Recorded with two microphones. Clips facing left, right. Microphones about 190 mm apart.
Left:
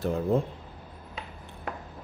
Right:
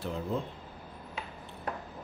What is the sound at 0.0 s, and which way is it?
Speech, 50° left (ahead or behind).